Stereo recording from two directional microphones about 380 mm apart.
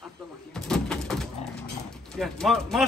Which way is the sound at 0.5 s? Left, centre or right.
Centre.